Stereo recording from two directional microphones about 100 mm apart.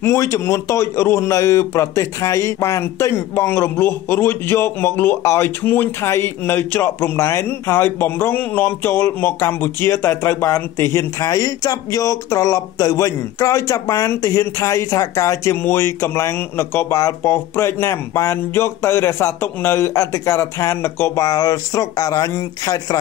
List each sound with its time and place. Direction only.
0.0 s a man's voice: 30° left (ahead or behind)
21.2 s speech: 35° left (ahead or behind)